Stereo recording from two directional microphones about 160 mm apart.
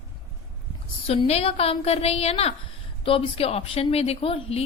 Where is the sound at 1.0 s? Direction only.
40° left (ahead or behind).